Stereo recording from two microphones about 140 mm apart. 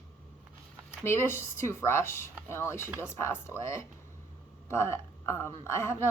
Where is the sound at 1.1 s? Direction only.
20° left (ahead or behind).